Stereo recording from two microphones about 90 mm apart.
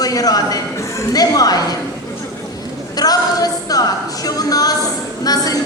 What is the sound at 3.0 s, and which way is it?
A woman's voice, 45° left (ahead or behind).